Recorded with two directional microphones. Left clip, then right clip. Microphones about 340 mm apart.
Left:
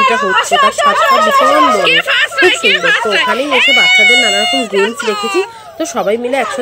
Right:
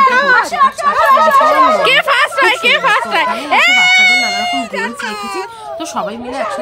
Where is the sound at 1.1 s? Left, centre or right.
Left.